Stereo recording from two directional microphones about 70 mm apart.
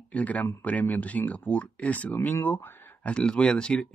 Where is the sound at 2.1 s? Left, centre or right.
Left.